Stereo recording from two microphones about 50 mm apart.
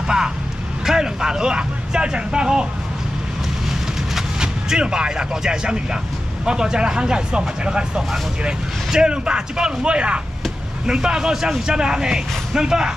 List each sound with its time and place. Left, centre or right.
0.8 s speech: centre
4.1 s speech: centre